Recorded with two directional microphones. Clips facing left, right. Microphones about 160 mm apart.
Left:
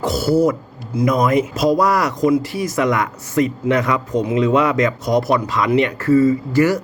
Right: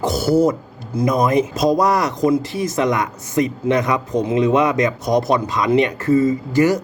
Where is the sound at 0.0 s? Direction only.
20° right (ahead or behind).